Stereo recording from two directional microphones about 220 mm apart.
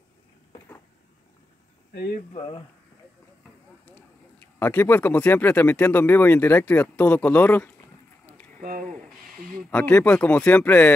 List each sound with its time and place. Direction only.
2.0 s speech: 45° left (ahead or behind)
2.3 s speech: 25° left (ahead or behind)
4.6 s speech: 10° left (ahead or behind)
8.5 s a sound: 40° right (ahead or behind)
9.5 s speech: 5° left (ahead or behind)